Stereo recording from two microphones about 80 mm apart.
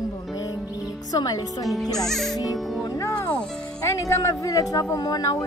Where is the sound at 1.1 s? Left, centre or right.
Left.